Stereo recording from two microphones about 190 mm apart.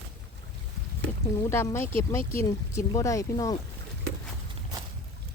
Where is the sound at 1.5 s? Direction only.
15° left (ahead or behind).